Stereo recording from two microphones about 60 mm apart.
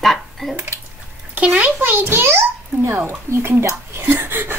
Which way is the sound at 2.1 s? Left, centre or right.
Right.